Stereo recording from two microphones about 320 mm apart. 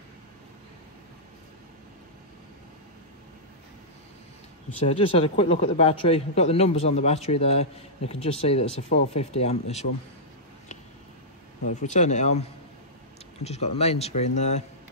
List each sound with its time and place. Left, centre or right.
4.8 s a man's voice: centre
11.6 s a man's voice: left